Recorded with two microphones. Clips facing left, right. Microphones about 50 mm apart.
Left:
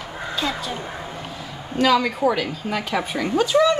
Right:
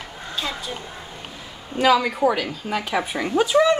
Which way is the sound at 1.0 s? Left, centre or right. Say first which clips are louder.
Left 5 dB; left.